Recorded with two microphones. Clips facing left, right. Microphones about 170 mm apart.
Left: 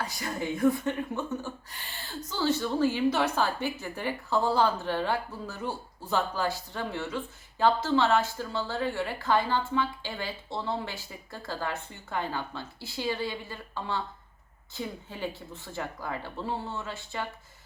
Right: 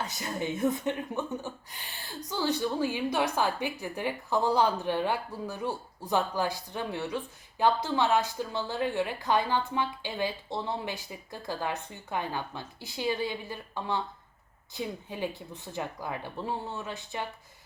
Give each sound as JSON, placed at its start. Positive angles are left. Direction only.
{"t": 0.0, "sound": "speech", "side_deg": -20}